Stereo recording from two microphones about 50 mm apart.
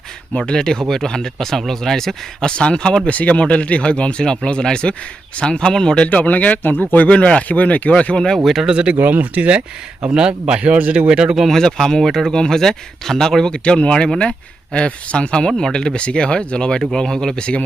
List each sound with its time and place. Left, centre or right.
0.3 s speech: centre
2.5 s speech: centre
3.1 s speech: left
6.1 s a man's voice: left
7.1 s speech: left
8.7 s speech: right
9.0 s speech: right
10.1 s speech: centre
11.1 s speech: centre
11.3 s speech: centre